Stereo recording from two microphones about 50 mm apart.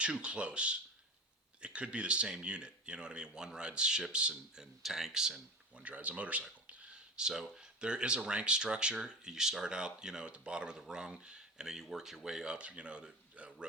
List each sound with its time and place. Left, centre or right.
0.0 s speech: right
4.6 s speech: centre
5.7 s speech: right